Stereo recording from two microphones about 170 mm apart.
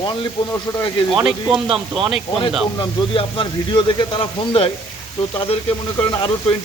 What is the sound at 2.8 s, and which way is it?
Speech, 30° left (ahead or behind).